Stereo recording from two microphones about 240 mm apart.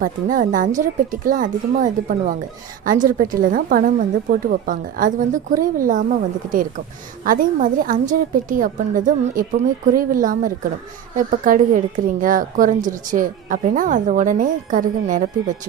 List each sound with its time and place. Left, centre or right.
0.0 s a woman's voice: right